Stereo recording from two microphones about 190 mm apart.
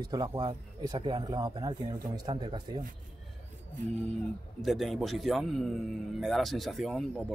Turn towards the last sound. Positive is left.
turn(degrees=5)  # may be behind; listen again after turning